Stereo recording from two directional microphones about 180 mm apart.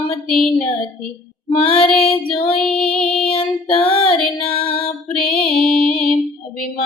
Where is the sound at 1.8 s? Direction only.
5° left (ahead or behind).